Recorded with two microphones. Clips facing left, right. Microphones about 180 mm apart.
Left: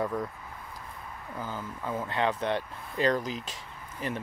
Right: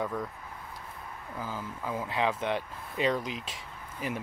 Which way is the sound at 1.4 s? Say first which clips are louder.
Even; 5° right (ahead or behind).